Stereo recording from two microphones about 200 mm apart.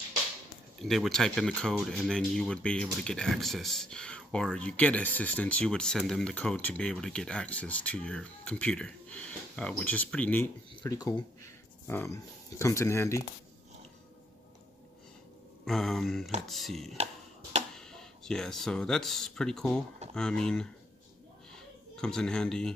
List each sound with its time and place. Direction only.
0.7 s speech: centre (ahead or behind)
15.6 s speech: centre (ahead or behind)
16.9 s a sound: 30° right (ahead or behind)
17.7 s speech: 5° left (ahead or behind)
21.9 s speech: 5° left (ahead or behind)